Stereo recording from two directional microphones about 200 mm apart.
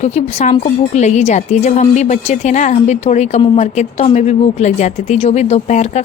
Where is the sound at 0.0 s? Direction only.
35° left (ahead or behind).